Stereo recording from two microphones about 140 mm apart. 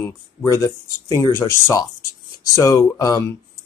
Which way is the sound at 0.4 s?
20° left (ahead or behind).